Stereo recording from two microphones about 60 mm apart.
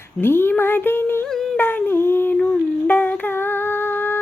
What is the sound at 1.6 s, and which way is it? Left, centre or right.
Humming, left.